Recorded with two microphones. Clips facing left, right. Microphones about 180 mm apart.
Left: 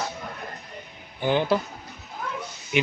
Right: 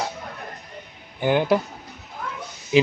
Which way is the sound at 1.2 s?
10° right (ahead or behind).